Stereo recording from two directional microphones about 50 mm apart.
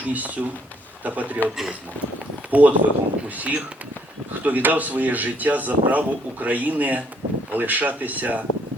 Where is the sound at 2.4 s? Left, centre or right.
Right.